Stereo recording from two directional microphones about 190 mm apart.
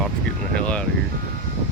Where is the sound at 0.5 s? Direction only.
5° left (ahead or behind).